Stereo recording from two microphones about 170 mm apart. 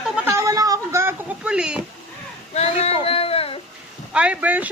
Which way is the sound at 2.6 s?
40° left (ahead or behind).